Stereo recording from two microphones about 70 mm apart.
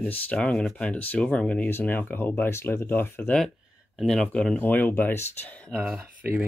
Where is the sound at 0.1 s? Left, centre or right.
Centre.